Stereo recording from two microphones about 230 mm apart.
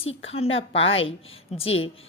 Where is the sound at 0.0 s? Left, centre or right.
Left.